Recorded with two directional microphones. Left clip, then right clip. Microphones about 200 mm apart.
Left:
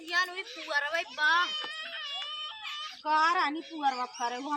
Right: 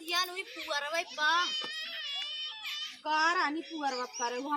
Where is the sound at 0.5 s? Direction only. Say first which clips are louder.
Left 3 dB; 10° right (ahead or behind).